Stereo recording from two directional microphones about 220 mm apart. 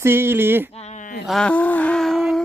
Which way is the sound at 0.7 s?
30° left (ahead or behind).